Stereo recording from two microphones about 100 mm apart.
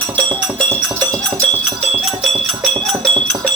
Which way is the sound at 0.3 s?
15° left (ahead or behind).